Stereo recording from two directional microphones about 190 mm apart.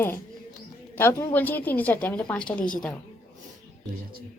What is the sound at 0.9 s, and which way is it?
A woman's voice, 15° left (ahead or behind).